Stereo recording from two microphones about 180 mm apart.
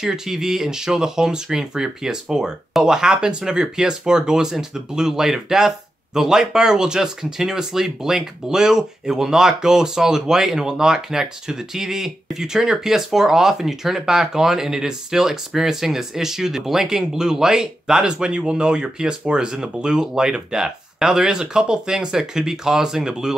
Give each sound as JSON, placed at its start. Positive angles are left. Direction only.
{"t": 0.0, "sound": "speech", "side_deg": 0}